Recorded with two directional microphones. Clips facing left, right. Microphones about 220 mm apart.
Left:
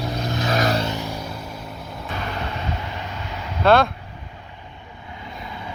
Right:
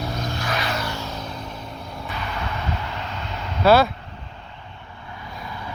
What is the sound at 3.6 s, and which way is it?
Speech, 5° right (ahead or behind).